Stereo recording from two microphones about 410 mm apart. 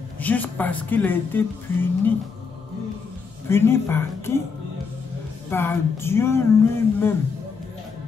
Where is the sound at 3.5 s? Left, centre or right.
Centre.